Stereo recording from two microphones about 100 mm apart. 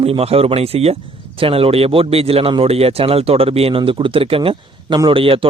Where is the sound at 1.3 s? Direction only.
70° right (ahead or behind).